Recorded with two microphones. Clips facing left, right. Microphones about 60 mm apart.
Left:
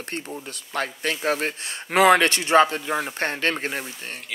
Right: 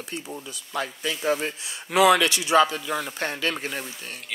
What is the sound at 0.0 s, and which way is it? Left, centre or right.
A man's voice, left.